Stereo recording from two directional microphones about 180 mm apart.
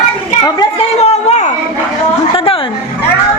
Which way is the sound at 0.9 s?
35° left (ahead or behind).